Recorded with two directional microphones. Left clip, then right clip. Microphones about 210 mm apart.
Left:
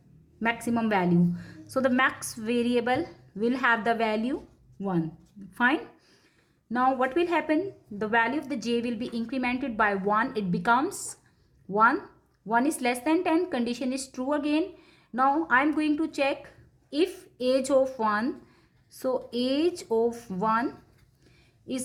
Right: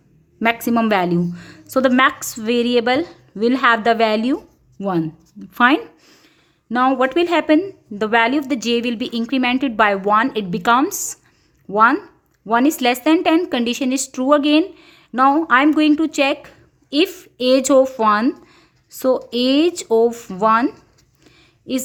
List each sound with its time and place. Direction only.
0.3 s a woman's voice: 35° right (ahead or behind)